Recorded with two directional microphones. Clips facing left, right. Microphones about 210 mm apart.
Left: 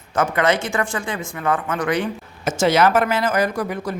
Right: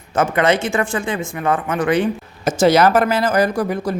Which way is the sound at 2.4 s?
35° right (ahead or behind).